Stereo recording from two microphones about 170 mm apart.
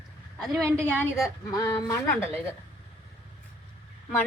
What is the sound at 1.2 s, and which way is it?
A woman's voice, 20° left (ahead or behind).